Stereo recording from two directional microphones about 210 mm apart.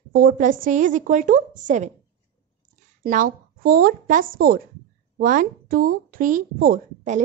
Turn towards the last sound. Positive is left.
turn(degrees=-40)  # may be behind; listen again after turning